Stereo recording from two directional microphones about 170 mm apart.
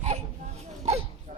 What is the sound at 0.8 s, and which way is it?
Dog, 40° right (ahead or behind).